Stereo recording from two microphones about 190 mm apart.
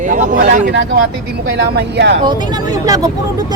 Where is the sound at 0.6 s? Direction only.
65° right (ahead or behind).